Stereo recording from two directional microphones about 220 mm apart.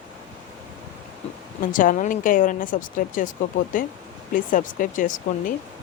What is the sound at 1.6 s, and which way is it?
Speech, 35° left (ahead or behind).